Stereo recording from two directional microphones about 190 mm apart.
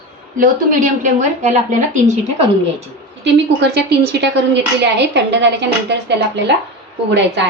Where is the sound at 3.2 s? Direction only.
60° right (ahead or behind).